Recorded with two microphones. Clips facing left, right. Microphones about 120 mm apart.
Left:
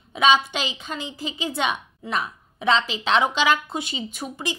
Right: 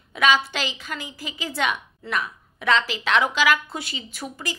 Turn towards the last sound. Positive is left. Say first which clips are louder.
# left 3 dB
turn(degrees=20)  # may be behind; listen again after turning